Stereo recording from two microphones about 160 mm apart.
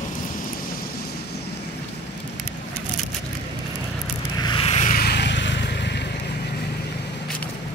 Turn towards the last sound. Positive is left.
turn(degrees=90)